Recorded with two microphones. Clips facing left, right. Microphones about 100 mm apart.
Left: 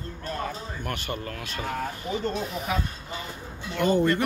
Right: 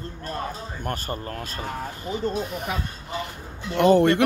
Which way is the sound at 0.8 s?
40° right (ahead or behind).